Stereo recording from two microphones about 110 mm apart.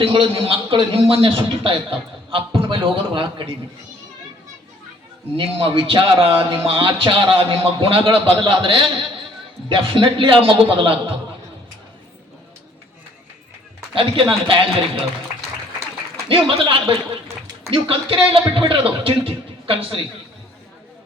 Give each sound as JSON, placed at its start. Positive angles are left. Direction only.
{"t": 0.0, "sound": "a man's voice", "side_deg": -55}
{"t": 5.4, "sound": "a man's voice", "side_deg": -55}
{"t": 13.9, "sound": "a man's voice", "side_deg": -55}
{"t": 16.3, "sound": "a man's voice", "side_deg": -55}